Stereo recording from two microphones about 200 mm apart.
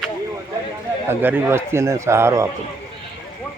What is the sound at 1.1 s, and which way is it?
A man's voice, 10° right (ahead or behind).